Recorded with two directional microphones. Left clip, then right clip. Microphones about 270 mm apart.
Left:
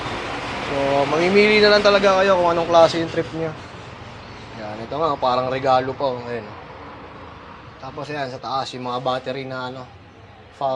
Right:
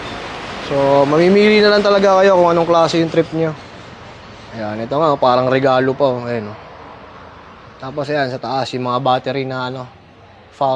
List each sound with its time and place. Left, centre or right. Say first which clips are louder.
0.9 s speech: right 4 dB; right
4.6 s speech: right 7 dB; right
7.9 s speech: right 9 dB; right